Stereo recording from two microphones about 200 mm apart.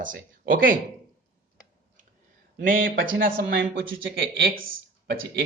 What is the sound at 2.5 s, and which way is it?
A man's voice, 45° right (ahead or behind).